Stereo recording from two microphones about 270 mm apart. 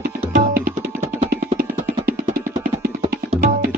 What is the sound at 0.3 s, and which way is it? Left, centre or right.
Music, right.